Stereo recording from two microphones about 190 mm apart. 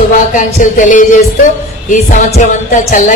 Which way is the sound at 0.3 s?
40° left (ahead or behind).